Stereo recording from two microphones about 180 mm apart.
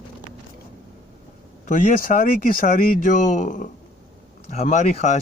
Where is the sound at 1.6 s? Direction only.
50° left (ahead or behind).